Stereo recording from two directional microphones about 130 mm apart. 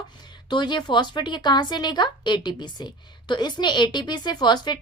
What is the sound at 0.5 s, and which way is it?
A woman's voice, 35° left (ahead or behind).